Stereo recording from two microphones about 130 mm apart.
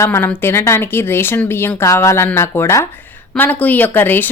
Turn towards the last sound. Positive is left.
turn(degrees=15)  # may be behind; listen again after turning